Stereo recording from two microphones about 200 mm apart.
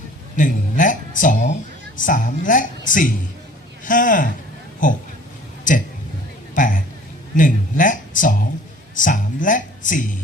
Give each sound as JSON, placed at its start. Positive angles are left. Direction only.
{"t": 0.3, "sound": "a woman's voice", "side_deg": 40}
{"t": 6.5, "sound": "a sound", "side_deg": 40}
{"t": 7.3, "sound": "speech", "side_deg": 40}